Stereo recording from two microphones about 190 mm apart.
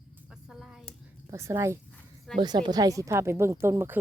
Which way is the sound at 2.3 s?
Centre (ahead or behind).